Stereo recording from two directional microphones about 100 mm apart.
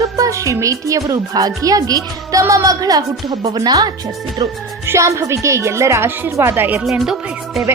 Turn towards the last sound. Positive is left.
turn(degrees=-5)  # may be behind; listen again after turning